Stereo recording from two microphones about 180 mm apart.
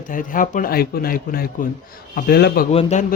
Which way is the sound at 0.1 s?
50° left (ahead or behind).